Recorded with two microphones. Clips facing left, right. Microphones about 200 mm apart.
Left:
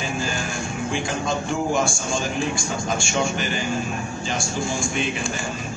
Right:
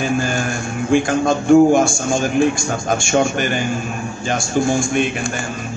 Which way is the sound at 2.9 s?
55° right (ahead or behind).